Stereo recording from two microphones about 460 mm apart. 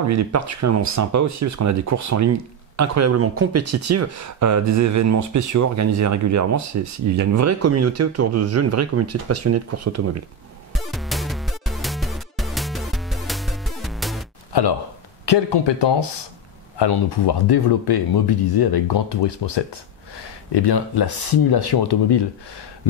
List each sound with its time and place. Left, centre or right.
0.0 s speech: right
10.7 s music: centre
15.2 s speech: left